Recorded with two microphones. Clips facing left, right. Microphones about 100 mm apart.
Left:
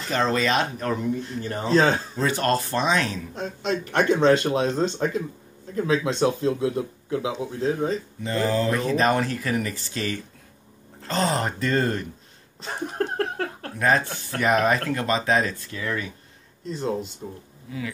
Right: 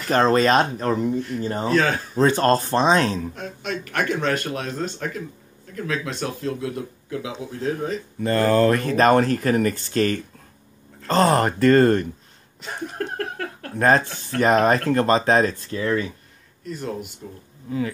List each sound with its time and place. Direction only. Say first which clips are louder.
0.1 s speech: right 6 dB; 45° right (ahead or behind)
1.4 s speech: right 4 dB; 25° right (ahead or behind)
1.7 s speech: left 2 dB; 25° left (ahead or behind)
2.1 s speech: right 5 dB; 35° right (ahead or behind)
3.3 s speech: left 3 dB; 30° left (ahead or behind)
8.2 s speech: right 7 dB; 55° right (ahead or behind)
11.2 s speech: right 9 dB; 60° right (ahead or behind)
12.6 s laughter: left 2 dB; 30° left (ahead or behind)
13.7 s speech: right 4 dB; 45° right (ahead or behind)
16.6 s speech: left 2 dB; 25° left (ahead or behind)
17.6 s speech: right 7 dB; 35° right (ahead or behind)